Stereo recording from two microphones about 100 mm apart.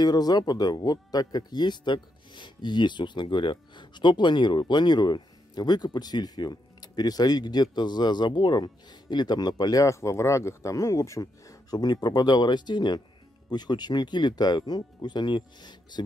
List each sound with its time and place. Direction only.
0.0 s speech: 40° left (ahead or behind)